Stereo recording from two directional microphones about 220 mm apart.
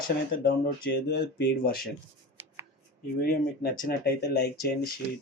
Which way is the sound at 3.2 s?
40° left (ahead or behind).